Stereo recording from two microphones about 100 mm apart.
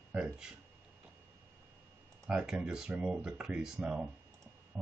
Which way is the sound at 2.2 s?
5° right (ahead or behind).